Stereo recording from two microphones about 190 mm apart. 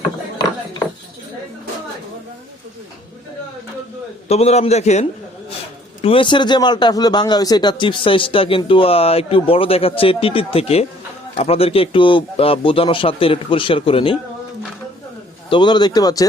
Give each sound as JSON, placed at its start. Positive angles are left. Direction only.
{"t": 4.3, "sound": "a man's voice", "side_deg": 35}
{"t": 15.4, "sound": "a man's voice", "side_deg": 25}